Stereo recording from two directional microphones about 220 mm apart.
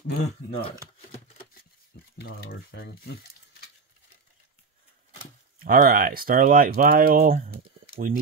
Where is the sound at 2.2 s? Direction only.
45° left (ahead or behind).